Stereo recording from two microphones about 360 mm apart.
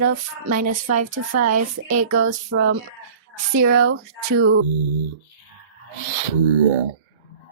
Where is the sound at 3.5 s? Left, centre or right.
Right.